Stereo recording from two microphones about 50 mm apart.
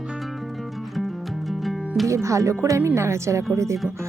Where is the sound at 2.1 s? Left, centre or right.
Right.